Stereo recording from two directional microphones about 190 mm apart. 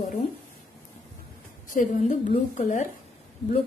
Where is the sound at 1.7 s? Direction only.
40° left (ahead or behind).